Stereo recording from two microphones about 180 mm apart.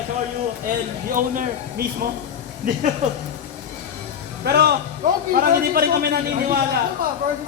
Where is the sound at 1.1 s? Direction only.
45° right (ahead or behind).